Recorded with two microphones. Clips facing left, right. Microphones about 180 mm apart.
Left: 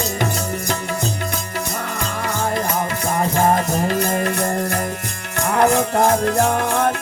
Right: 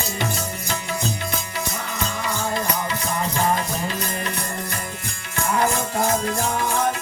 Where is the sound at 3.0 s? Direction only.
50° left (ahead or behind).